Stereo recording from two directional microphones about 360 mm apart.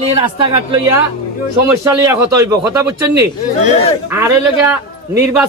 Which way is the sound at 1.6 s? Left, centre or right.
Centre.